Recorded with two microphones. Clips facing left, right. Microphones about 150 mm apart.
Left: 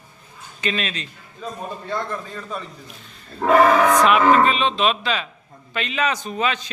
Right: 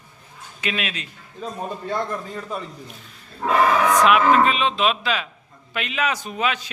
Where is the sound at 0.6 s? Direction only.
5° right (ahead or behind).